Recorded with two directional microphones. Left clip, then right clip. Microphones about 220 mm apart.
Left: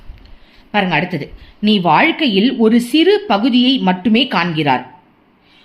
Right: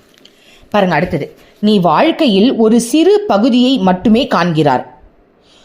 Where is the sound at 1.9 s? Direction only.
30° right (ahead or behind).